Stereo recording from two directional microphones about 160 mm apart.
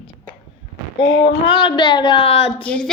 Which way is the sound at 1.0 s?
90° left.